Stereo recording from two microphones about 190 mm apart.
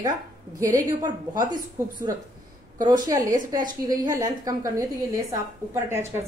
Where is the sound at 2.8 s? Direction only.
20° right (ahead or behind).